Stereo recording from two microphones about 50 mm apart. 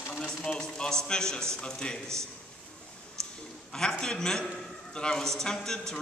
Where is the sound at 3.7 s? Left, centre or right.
Centre.